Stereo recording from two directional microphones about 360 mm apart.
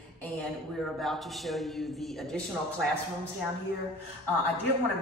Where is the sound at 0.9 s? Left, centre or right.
Centre.